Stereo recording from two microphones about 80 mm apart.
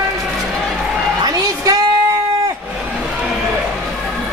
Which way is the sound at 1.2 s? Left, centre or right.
Right.